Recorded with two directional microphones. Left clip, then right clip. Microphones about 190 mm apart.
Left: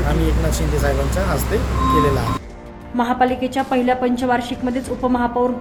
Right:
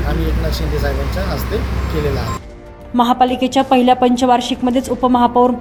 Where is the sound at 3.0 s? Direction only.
30° right (ahead or behind).